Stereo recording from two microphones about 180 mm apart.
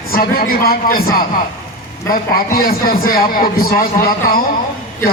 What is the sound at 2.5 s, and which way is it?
A man's voice, 55° left (ahead or behind).